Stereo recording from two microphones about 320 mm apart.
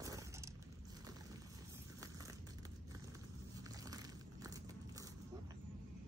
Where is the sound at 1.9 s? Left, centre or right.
Centre.